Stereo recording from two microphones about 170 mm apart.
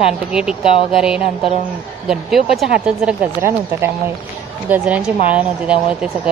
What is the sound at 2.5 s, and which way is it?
Speech, 5° right (ahead or behind).